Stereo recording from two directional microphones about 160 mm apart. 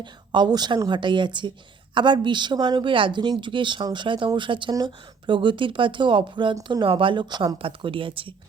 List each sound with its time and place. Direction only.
0.0 s a woman's voice: 30° right (ahead or behind)